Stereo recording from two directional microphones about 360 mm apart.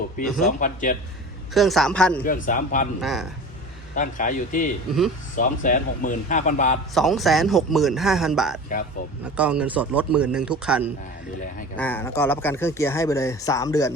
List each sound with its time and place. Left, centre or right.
0.3 s speech: left
1.5 s speech: centre
2.2 s speech: left
3.0 s speech: centre
3.9 s speech: left
4.9 s speech: centre
5.4 s speech: left
6.9 s speech: centre